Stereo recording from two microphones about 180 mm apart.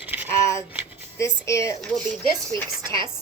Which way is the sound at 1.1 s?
15° left (ahead or behind).